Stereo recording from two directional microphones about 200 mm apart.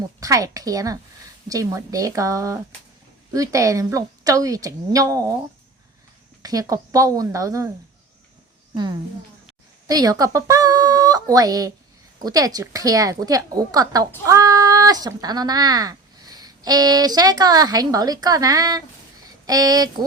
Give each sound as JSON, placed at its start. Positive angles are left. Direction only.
{"t": 0.2, "sound": "a woman's voice", "side_deg": -15}
{"t": 6.4, "sound": "a woman's voice", "side_deg": -20}
{"t": 8.7, "sound": "a woman's voice", "side_deg": -20}